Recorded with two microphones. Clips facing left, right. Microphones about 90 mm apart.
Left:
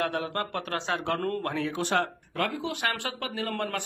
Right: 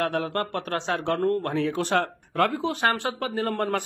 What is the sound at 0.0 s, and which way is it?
Speech, 45° right (ahead or behind).